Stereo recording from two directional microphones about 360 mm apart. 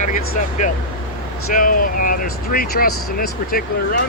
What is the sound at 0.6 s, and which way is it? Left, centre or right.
Speech, left.